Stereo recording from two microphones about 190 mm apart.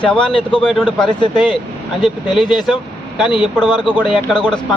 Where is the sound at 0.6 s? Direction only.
Centre (ahead or behind).